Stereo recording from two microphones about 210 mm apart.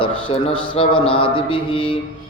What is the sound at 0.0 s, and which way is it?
Mantra, 25° left (ahead or behind).